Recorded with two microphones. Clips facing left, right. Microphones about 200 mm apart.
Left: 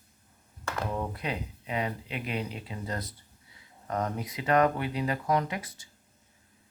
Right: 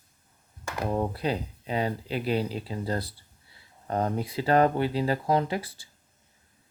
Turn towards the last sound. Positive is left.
turn(degrees=-30)  # may be behind; listen again after turning